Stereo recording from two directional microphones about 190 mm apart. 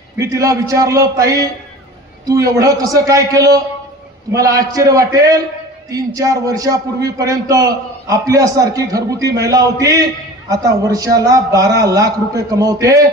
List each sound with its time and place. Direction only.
0.2 s a man's voice: 15° right (ahead or behind)